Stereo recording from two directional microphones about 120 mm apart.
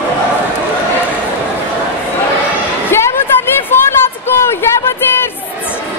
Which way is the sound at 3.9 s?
20° left (ahead or behind).